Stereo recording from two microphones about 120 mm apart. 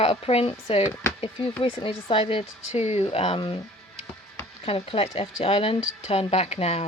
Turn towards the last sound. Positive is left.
turn(degrees=60)  # may be behind; listen again after turning